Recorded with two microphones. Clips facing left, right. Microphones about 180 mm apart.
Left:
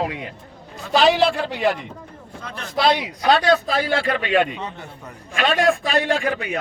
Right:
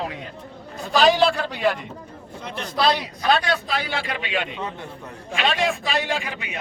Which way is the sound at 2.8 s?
25° left (ahead or behind).